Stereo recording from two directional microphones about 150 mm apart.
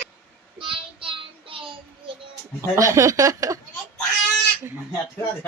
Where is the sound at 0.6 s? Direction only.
35° right (ahead or behind).